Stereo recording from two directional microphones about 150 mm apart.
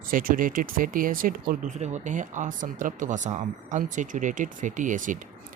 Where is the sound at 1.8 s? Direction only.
50° right (ahead or behind).